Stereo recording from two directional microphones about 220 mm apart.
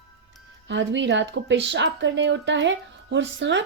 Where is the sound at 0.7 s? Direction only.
55° right (ahead or behind).